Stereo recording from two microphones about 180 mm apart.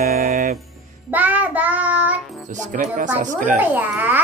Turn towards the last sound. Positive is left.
turn(degrees=-10)  # may be behind; listen again after turning